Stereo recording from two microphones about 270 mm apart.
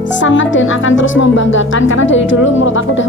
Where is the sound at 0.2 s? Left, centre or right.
Left.